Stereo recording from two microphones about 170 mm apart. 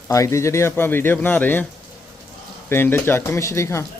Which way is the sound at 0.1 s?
20° left (ahead or behind).